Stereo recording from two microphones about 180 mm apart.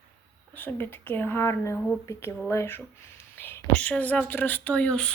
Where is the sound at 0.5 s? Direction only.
10° left (ahead or behind).